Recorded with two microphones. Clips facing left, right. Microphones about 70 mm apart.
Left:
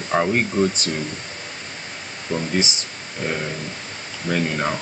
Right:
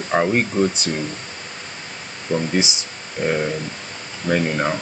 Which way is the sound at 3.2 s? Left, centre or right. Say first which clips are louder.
Right 5 dB; right.